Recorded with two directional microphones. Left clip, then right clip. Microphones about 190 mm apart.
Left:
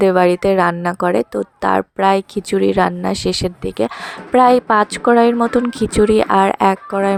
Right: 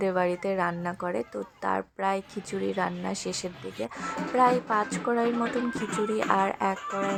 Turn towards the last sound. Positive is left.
turn(degrees=45)  # may be behind; listen again after turning